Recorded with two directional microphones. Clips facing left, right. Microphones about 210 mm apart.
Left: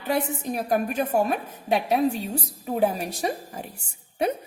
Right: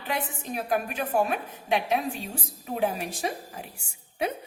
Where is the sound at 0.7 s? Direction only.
40° left (ahead or behind).